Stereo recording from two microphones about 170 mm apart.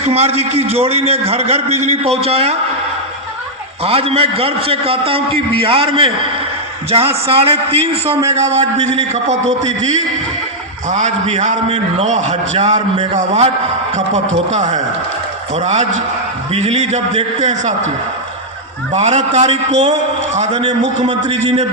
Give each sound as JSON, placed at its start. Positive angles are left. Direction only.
{"t": 0.1, "sound": "a man's voice", "side_deg": -35}
{"t": 3.8, "sound": "a man's voice", "side_deg": -35}
{"t": 18.9, "sound": "a man's voice", "side_deg": -40}